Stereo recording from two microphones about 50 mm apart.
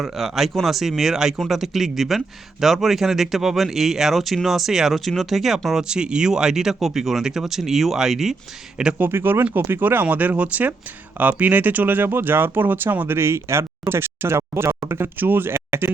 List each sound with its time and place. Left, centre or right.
0.0 s speech: centre
9.1 s speech: right
13.1 s speech: right
15.2 s speech: right